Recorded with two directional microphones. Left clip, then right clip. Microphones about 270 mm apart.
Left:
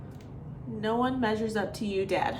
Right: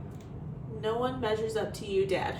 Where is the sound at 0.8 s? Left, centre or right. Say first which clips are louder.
Left 2 dB; left.